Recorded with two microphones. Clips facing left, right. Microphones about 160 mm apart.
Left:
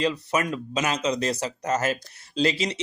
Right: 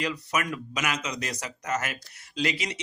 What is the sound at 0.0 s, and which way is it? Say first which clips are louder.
Speech: left 5 dB; 30° left (ahead or behind).